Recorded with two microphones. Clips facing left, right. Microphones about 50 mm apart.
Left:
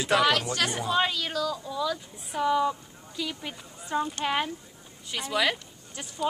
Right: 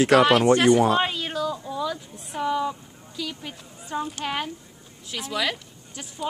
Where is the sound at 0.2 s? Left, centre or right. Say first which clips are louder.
Right 7 dB; right.